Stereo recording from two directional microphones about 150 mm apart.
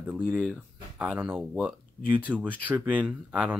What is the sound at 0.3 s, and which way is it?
Speech, 10° right (ahead or behind).